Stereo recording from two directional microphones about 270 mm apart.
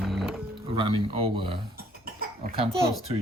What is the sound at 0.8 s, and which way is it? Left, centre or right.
Speech, centre.